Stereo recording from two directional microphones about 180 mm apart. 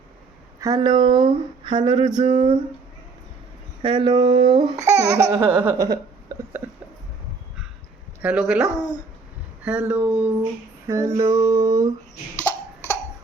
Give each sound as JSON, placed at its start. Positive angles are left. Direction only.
{"t": 0.6, "sound": "speech", "side_deg": -20}
{"t": 3.8, "sound": "speech", "side_deg": -25}
{"t": 4.9, "sound": "laughter", "side_deg": -20}
{"t": 8.2, "sound": "speech", "side_deg": -5}
{"t": 10.8, "sound": "female singing", "side_deg": -15}
{"t": 11.2, "sound": "speech", "side_deg": -15}
{"t": 12.4, "sound": "cough", "side_deg": 10}